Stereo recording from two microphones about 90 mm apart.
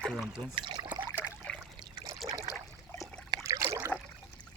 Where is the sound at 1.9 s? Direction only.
40° right (ahead or behind).